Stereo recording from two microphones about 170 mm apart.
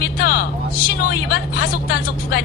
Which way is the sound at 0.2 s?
60° left (ahead or behind).